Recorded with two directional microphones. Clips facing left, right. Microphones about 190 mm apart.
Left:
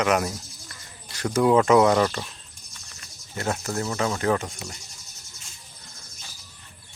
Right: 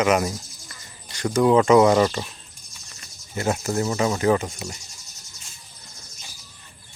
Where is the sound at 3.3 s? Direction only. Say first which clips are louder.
Right 4 dB; 10° right (ahead or behind).